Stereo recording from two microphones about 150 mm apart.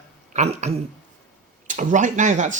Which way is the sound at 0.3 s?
45° right (ahead or behind).